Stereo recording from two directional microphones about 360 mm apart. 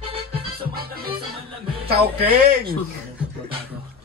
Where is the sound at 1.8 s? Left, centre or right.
Right.